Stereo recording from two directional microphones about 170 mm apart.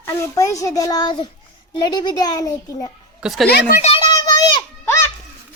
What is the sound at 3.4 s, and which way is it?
Speech, 70° left (ahead or behind).